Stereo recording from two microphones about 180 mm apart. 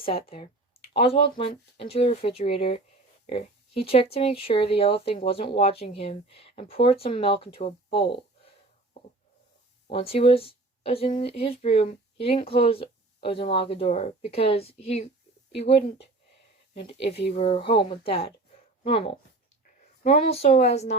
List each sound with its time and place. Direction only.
0.0 s speech: 30° left (ahead or behind)
9.8 s speech: 30° left (ahead or behind)
17.3 s speech: 35° left (ahead or behind)